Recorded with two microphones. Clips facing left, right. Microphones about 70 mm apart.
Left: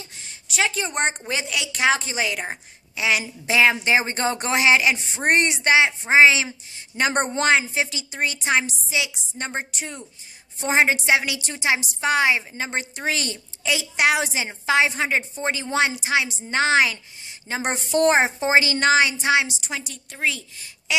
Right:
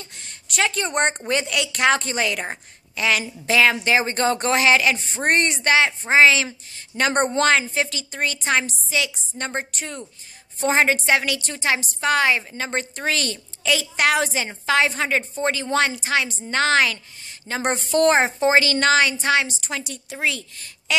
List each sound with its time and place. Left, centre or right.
0.0 s a woman's voice: centre